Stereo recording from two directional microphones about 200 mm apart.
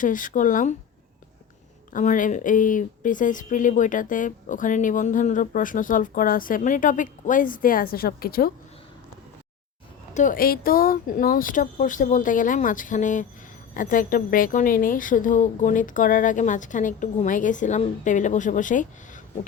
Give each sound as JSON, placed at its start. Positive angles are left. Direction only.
{"t": 0.0, "sound": "a woman's voice", "side_deg": 40}
{"t": 1.9, "sound": "a woman's voice", "side_deg": 40}
{"t": 10.2, "sound": "a woman's voice", "side_deg": 45}